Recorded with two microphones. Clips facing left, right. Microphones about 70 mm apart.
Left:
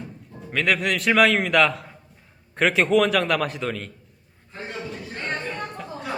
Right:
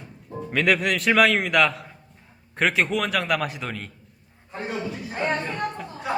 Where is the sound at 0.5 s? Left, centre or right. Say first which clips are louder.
Right 1 dB; centre.